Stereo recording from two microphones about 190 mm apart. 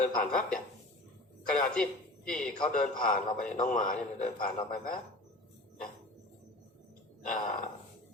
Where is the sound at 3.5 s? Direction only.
45° left (ahead or behind).